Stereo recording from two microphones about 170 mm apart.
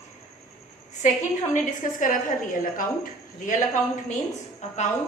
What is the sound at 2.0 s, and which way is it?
Speech, 50° left (ahead or behind).